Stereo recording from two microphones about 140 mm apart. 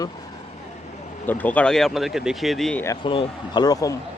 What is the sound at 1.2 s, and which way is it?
Speech, 10° left (ahead or behind).